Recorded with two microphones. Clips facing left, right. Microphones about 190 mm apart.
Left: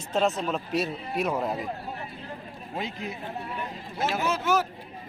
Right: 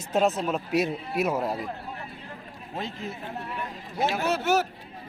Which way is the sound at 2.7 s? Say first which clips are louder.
Even; 15° left (ahead or behind).